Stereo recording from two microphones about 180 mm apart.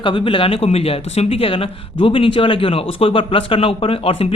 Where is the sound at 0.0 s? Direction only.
30° left (ahead or behind).